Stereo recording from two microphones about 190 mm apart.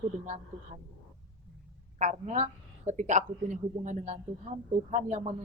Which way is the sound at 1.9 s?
40° right (ahead or behind).